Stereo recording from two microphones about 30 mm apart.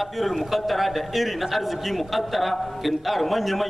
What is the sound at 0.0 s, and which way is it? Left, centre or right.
A man's voice, centre.